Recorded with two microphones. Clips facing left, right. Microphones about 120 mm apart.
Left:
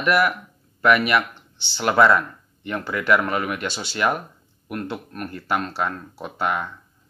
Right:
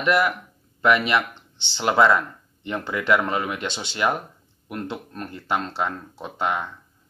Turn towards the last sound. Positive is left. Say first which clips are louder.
# left 1 dB
turn(degrees=-20)  # may be behind; listen again after turning